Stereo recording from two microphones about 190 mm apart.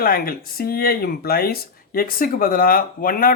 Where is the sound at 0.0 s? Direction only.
50° left (ahead or behind).